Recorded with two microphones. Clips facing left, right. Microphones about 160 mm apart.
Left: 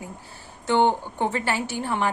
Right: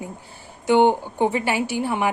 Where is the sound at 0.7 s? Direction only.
15° right (ahead or behind).